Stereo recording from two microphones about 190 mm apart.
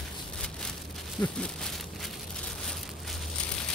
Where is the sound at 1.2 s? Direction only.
5° left (ahead or behind).